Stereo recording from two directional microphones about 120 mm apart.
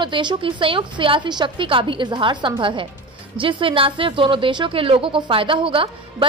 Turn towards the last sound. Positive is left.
turn(degrees=-45)  # may be behind; listen again after turning